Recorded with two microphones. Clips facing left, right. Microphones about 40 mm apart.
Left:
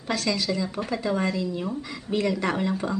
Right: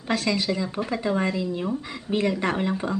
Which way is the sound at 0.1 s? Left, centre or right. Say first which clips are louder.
Right 2 dB; right.